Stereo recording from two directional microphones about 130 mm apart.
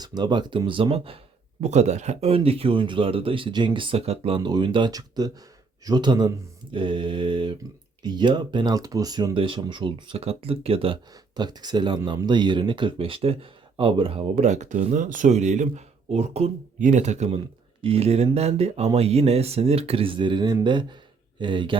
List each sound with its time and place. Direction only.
0.0 s speech: 35° right (ahead or behind)
1.6 s speech: 60° right (ahead or behind)
4.4 s speech: 35° right (ahead or behind)
9.3 s speech: 40° right (ahead or behind)
11.3 s speech: 35° right (ahead or behind)
14.4 s speech: 65° right (ahead or behind)
14.9 s speech: 80° right; by 16.5 s 55° right (ahead or behind)
16.8 s speech: 65° right (ahead or behind)
17.8 s speech: 50° right (ahead or behind)